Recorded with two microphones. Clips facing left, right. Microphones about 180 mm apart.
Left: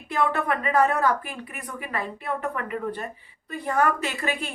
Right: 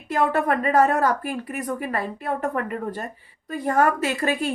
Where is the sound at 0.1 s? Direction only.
40° right (ahead or behind).